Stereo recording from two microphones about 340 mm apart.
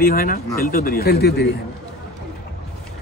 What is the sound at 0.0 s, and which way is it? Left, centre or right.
Speech, left.